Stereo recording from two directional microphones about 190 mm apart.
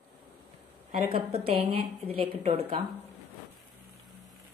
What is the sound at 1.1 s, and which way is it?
A woman's voice, 30° right (ahead or behind).